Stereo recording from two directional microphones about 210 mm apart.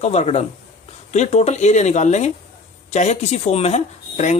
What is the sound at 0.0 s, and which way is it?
Speech, 30° left (ahead or behind).